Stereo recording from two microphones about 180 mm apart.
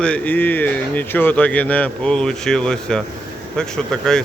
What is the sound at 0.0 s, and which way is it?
Speech, 10° left (ahead or behind).